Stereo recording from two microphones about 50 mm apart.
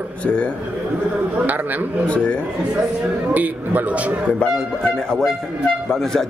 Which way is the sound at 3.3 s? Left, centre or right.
Right.